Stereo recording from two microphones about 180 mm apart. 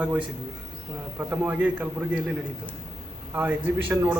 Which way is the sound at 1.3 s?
10° right (ahead or behind).